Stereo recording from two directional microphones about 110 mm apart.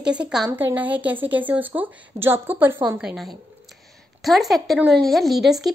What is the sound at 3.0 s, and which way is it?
A woman's voice, centre (ahead or behind).